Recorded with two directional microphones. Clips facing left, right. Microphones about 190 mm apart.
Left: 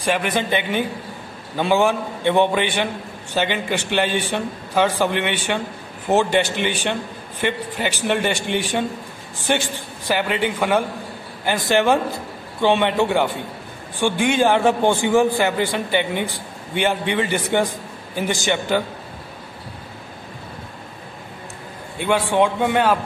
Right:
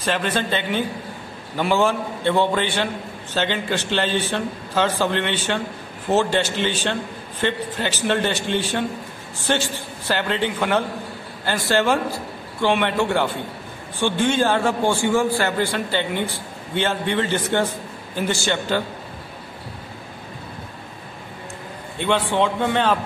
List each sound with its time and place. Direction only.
0.0 s a man's voice: 10° left (ahead or behind)
21.9 s a man's voice: 10° left (ahead or behind)